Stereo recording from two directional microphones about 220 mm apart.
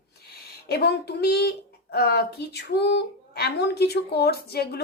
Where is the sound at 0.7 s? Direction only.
45° left (ahead or behind).